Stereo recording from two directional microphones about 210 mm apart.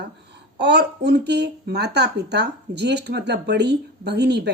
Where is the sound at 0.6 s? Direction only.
55° right (ahead or behind).